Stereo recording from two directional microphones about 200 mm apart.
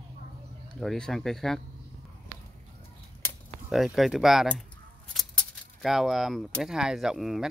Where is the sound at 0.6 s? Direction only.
Centre (ahead or behind).